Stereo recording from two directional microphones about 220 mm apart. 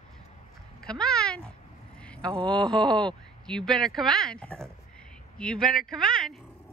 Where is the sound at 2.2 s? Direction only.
20° right (ahead or behind).